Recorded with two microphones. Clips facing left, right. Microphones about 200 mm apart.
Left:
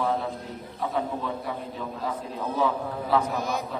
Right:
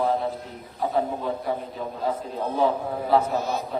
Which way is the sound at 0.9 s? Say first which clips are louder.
Right 4 dB; 30° right (ahead or behind).